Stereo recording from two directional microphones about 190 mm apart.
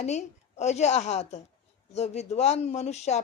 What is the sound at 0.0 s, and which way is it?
Speech, 35° left (ahead or behind).